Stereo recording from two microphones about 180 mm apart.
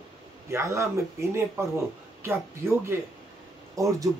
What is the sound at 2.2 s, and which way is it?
Speech, 15° right (ahead or behind).